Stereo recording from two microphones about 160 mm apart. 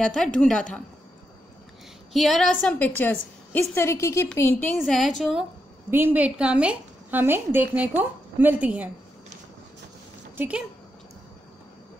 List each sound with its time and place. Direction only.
0.0 s a woman's voice: 5° left (ahead or behind)
2.1 s a woman's voice: centre (ahead or behind)
5.9 s a woman's voice: 15° right (ahead or behind)
10.3 s speech: 10° right (ahead or behind)